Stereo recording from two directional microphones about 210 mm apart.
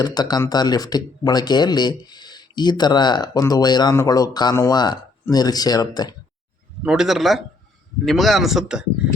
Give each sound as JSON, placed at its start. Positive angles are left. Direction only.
{"t": 0.0, "sound": "speech", "side_deg": 20}
{"t": 6.8, "sound": "a man's voice", "side_deg": 0}